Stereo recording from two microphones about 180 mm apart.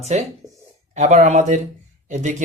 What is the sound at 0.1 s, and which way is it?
Speech, 40° right (ahead or behind).